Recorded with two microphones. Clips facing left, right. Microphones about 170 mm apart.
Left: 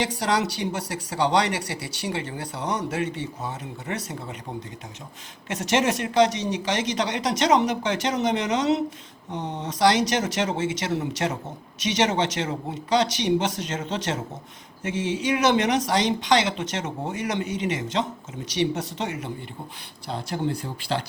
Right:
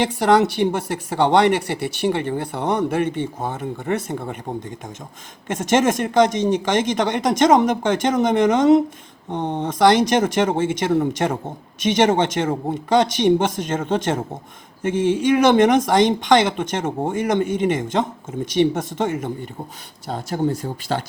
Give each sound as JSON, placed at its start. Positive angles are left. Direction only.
{"t": 0.3, "sound": "speech", "side_deg": -55}
{"t": 5.5, "sound": "speech", "side_deg": -50}